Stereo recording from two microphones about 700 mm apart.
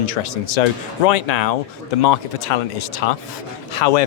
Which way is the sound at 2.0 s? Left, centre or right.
Left.